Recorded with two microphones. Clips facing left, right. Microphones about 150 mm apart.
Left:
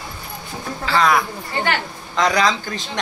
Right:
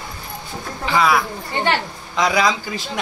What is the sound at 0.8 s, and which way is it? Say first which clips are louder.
A child's voice: even; 5° right (ahead or behind).